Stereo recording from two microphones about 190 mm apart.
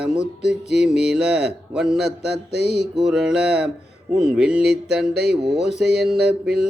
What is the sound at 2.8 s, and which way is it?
Speech, centre (ahead or behind).